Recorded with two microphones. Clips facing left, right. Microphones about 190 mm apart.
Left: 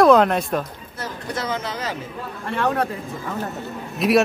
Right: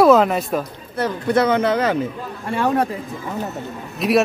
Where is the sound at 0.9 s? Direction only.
60° right (ahead or behind).